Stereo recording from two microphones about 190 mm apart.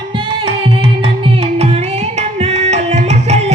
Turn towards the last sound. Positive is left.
turn(degrees=-35)  # may be behind; listen again after turning